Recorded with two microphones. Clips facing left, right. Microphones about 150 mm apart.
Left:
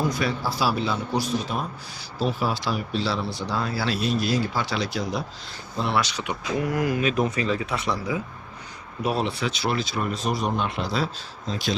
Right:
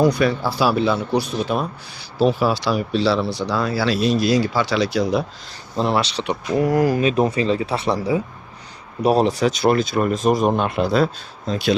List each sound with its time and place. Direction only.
0.0 s a man's voice: 65° right (ahead or behind); by 5.2 s 85° right
5.7 s speech: 35° right (ahead or behind); by 11.1 s 55° right (ahead or behind)